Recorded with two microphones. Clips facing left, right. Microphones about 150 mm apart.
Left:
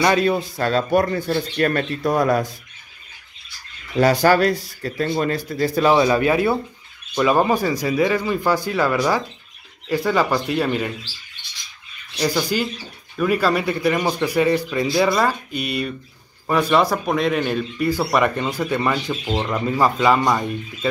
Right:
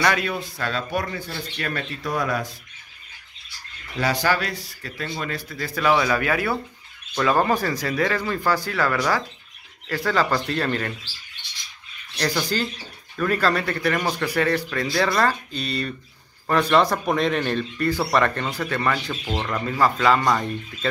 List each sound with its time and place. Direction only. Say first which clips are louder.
0.0 s speech: left 6 dB; 30° left (ahead or behind)
4.0 s speech: left 8 dB; 45° left (ahead or behind); by 10.9 s 10° left (ahead or behind)
12.2 s speech: left 3 dB; 10° left (ahead or behind)